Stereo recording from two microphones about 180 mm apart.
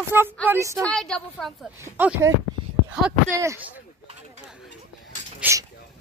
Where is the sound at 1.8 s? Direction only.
15° right (ahead or behind).